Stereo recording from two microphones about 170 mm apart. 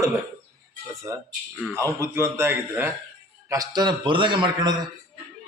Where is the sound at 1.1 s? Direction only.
15° right (ahead or behind).